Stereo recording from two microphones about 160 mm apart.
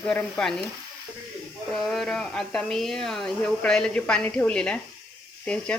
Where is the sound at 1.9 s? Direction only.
5° left (ahead or behind).